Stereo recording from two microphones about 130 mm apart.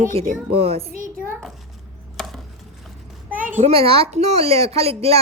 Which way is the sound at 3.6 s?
45° right (ahead or behind).